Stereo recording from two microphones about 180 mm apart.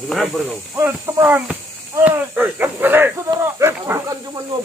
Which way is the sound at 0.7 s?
15° right (ahead or behind).